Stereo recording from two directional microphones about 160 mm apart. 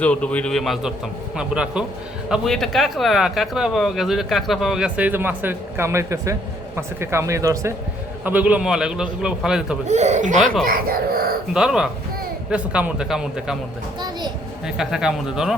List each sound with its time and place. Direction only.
0.0 s speech: 10° left (ahead or behind)
9.9 s speech: 45° right (ahead or behind)
10.7 s speech: 65° right (ahead or behind)
11.5 s speech: 5° right (ahead or behind)
14.8 s speech: 5° right (ahead or behind)